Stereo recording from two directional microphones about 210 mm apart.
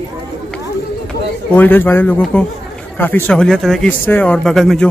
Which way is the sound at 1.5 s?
10° left (ahead or behind).